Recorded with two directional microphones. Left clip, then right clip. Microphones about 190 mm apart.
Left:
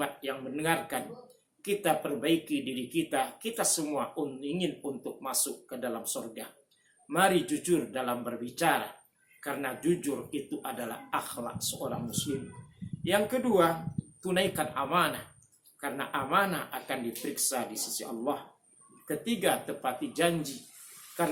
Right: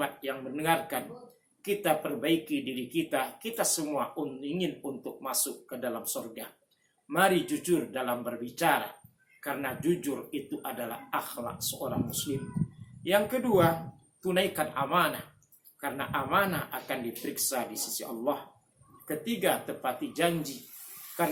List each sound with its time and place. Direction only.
0.0 s speech: 10° left (ahead or behind)
13.0 s speech: 5° left (ahead or behind)